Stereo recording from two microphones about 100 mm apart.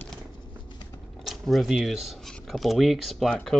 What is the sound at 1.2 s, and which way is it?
Speech, centre (ahead or behind).